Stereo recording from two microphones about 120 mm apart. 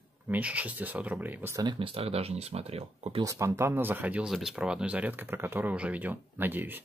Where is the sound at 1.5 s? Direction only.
40° right (ahead or behind); by 3.2 s 60° right (ahead or behind).